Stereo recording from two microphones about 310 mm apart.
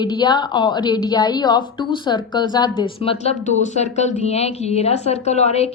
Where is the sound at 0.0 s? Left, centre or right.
Centre.